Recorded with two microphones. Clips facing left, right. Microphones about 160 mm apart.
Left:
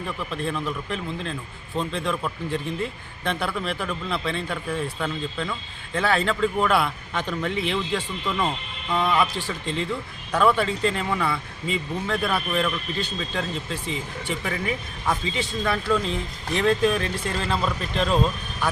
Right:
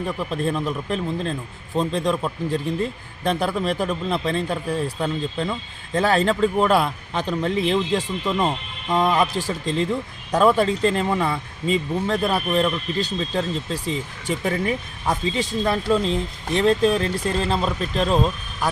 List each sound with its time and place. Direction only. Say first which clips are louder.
0.2 s speech: right 3 dB; 35° right (ahead or behind)
8.2 s speech: right 4 dB; 25° right (ahead or behind)